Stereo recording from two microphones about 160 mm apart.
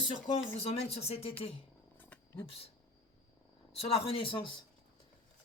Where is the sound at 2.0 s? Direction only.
10° left (ahead or behind).